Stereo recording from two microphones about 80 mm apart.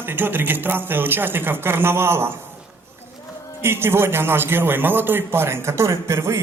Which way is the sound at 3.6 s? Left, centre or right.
Right.